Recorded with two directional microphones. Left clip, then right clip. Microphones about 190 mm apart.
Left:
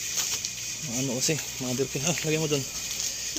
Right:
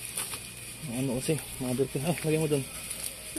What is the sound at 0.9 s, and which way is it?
Speech, centre (ahead or behind).